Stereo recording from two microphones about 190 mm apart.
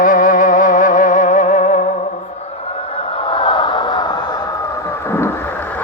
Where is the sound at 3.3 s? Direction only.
25° left (ahead or behind).